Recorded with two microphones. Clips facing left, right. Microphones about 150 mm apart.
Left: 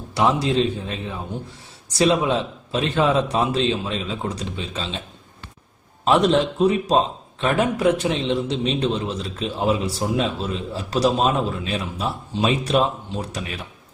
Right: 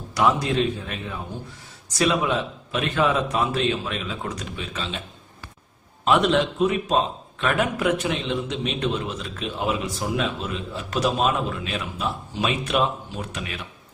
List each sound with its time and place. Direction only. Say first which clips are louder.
0.1 s a man's voice: left 2 dB; 30° left (ahead or behind)
6.1 s a man's voice: left 2 dB; 35° left (ahead or behind)